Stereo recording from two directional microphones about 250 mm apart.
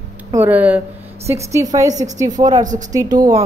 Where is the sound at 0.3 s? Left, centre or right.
Centre.